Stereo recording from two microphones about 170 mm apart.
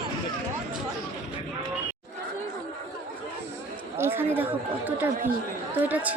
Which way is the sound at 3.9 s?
15° right (ahead or behind).